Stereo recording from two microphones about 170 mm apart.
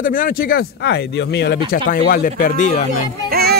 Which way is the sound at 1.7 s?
55° left (ahead or behind).